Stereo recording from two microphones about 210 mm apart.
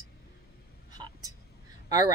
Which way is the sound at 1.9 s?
20° right (ahead or behind).